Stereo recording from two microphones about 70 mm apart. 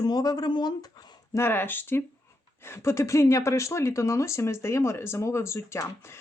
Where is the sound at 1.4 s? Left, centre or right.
Left.